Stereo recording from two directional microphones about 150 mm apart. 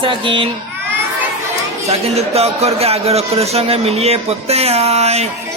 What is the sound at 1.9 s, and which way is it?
A man's voice, 45° right (ahead or behind).